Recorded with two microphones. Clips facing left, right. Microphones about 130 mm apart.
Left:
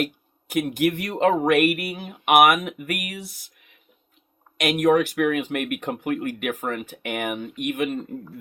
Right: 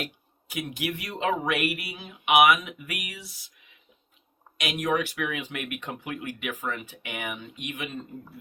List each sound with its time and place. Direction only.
0.0 s speech: 50° left (ahead or behind)